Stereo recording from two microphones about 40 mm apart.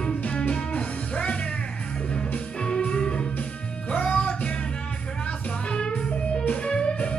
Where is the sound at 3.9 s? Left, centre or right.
Left.